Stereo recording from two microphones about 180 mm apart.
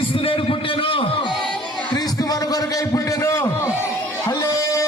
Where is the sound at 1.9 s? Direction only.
20° left (ahead or behind).